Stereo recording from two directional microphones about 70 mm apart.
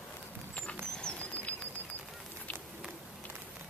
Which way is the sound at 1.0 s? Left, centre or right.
Centre.